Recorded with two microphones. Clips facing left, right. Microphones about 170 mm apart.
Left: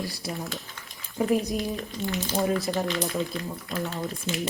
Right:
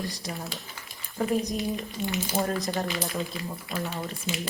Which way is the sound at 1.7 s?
15° right (ahead or behind).